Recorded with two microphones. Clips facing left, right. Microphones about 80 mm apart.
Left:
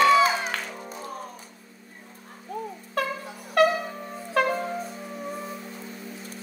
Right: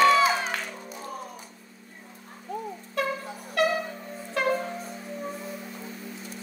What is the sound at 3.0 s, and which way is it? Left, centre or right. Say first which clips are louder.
Music: left 1 dB; left.